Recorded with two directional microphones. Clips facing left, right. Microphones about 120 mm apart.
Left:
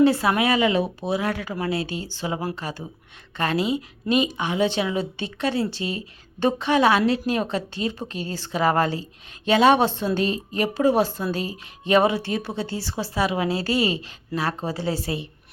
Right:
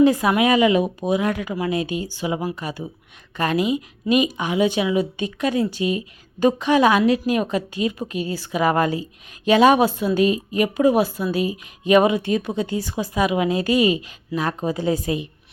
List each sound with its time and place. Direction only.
0.0 s a woman's voice: 15° right (ahead or behind)
7.3 s speech: 25° left (ahead or behind)
7.5 s a woman's voice: 15° right (ahead or behind)